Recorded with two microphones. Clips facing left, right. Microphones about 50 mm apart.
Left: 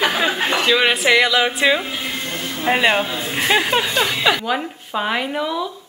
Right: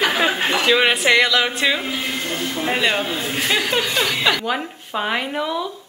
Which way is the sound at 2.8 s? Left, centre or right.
Centre.